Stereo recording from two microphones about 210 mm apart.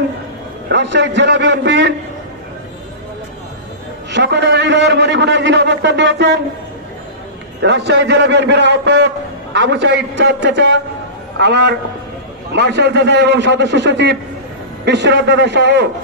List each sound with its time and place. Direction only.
0.7 s a man's voice: 60° right (ahead or behind)
4.1 s a man's voice: 55° right (ahead or behind)
7.6 s a man's voice: 55° right (ahead or behind)